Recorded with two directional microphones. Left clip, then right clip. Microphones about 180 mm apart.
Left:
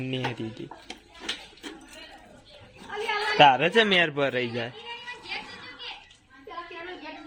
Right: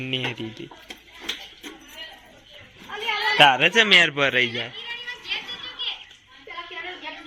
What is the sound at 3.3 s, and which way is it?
Speech, 15° left (ahead or behind).